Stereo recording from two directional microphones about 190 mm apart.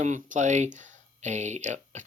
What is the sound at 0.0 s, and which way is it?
Speech, 40° right (ahead or behind).